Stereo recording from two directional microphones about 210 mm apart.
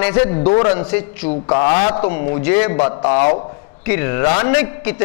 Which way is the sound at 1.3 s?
30° left (ahead or behind).